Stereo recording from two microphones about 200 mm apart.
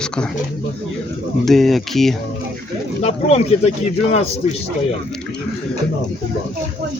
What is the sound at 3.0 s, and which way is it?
Speech, 30° left (ahead or behind).